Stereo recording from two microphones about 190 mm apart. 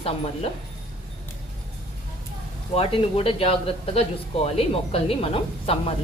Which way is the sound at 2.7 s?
30° left (ahead or behind).